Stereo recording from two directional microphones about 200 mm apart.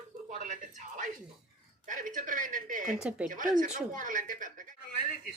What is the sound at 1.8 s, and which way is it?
Speech, 40° right (ahead or behind).